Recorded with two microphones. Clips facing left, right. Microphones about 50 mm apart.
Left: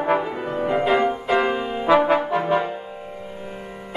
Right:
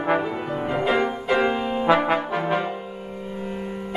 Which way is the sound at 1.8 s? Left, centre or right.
Centre.